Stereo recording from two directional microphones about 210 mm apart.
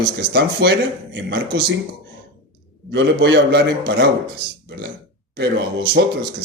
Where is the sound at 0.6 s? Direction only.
50° right (ahead or behind).